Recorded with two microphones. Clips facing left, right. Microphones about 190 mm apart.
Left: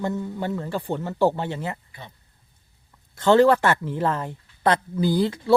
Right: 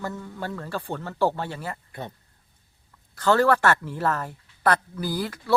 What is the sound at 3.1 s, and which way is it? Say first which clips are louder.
Speech: left 4 dB; 20° left (ahead or behind).